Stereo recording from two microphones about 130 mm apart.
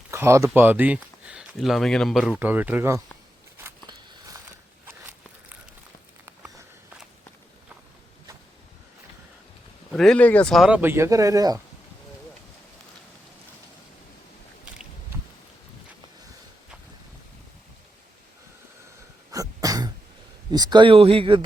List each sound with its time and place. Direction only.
0.1 s a sound: 20° right (ahead or behind)
1.5 s speech: centre (ahead or behind)
2.4 s speech: 15° right (ahead or behind)
4.9 s walk: 20° right (ahead or behind)
9.9 s speech: 5° left (ahead or behind)
10.7 s speech: 15° right (ahead or behind)
19.3 s throat clearing: 25° right (ahead or behind)
20.5 s speech: 30° right (ahead or behind)